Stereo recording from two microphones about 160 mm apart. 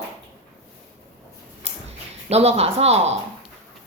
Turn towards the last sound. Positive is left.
turn(degrees=-40)  # may be behind; listen again after turning